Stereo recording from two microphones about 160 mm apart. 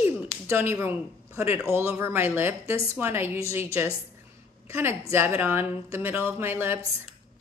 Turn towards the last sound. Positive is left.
turn(degrees=-15)  # may be behind; listen again after turning